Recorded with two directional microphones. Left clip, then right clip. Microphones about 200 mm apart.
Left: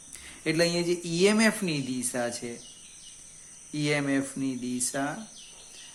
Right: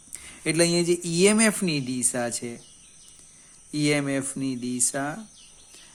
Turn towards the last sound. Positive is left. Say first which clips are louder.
# right 3 dB
turn(degrees=-45)  # may be behind; listen again after turning